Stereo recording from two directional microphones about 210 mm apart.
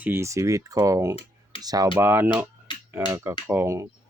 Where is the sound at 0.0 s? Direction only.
10° right (ahead or behind).